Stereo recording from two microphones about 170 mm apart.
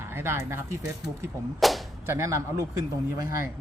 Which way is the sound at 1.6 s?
Centre (ahead or behind).